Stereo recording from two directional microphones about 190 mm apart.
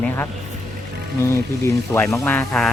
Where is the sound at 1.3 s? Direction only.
15° left (ahead or behind).